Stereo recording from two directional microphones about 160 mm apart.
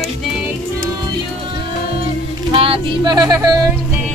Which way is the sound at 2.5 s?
35° right (ahead or behind).